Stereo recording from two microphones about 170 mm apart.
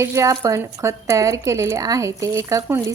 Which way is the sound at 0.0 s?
15° right (ahead or behind).